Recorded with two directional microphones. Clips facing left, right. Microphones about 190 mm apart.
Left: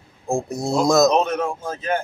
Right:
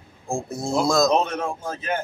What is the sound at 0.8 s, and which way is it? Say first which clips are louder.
Speech: left 3 dB; 20° left (ahead or behind).